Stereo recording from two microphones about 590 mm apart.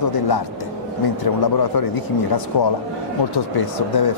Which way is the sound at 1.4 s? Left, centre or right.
Left.